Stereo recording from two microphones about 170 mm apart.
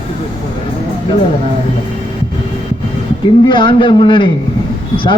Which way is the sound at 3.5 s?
25° left (ahead or behind).